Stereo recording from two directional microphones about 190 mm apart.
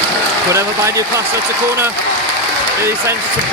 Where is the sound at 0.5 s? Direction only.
15° right (ahead or behind).